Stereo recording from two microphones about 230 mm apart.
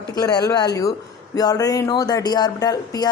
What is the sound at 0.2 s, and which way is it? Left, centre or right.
Speech, centre.